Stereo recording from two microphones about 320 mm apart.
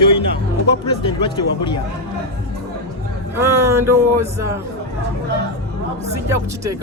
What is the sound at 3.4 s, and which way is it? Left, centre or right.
Speech, centre.